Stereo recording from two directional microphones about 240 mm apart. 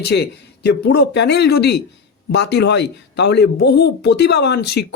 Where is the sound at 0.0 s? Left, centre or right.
Left.